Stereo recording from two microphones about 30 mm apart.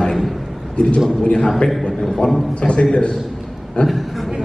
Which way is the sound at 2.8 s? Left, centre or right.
Left.